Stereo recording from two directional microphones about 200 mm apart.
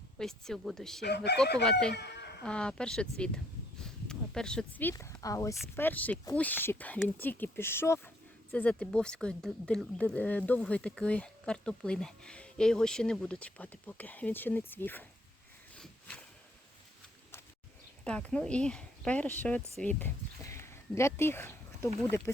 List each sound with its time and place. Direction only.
0.2 s speech: 5° left (ahead or behind)
1.0 s speech: 55° left (ahead or behind)
1.9 s chicken: 55° left (ahead or behind)
2.4 s speech: 5° left (ahead or behind)
15.7 s a sound: 5° left (ahead or behind)
18.0 s speech: 5° left (ahead or behind)
19.8 s a sound: 10° left (ahead or behind)